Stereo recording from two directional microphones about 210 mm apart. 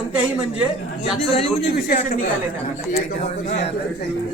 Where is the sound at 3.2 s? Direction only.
35° left (ahead or behind).